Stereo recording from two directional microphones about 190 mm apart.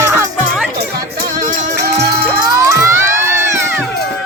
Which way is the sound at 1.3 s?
45° right (ahead or behind).